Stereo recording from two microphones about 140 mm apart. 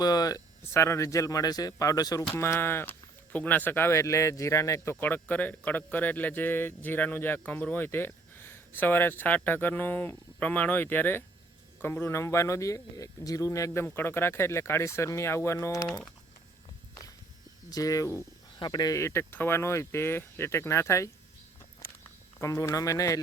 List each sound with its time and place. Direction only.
0.0 s speech: 30° left (ahead or behind)
17.7 s speech: 25° left (ahead or behind)
22.4 s speech: 20° left (ahead or behind)